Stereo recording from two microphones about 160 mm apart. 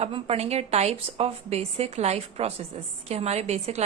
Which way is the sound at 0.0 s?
40° right (ahead or behind).